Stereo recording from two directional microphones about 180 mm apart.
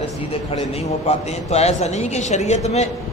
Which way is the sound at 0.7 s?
35° left (ahead or behind).